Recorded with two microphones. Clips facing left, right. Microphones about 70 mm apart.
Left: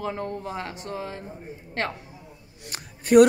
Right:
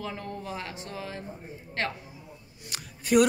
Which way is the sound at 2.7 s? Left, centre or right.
Left.